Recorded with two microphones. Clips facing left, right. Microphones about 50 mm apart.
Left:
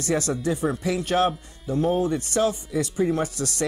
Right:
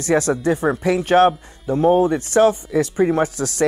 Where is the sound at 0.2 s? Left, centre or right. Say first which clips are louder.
Right 6 dB; right.